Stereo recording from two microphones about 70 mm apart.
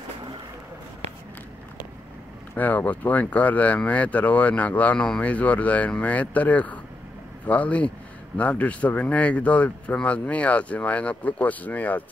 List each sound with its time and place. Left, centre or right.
2.5 s speech: left